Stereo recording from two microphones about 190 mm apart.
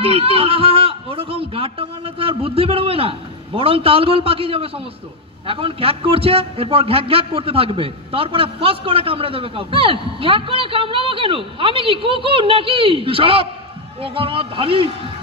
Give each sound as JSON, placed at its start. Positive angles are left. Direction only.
{"t": 0.0, "sound": "a man's voice", "side_deg": -30}